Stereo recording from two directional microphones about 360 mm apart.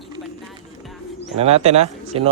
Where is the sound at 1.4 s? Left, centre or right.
Centre.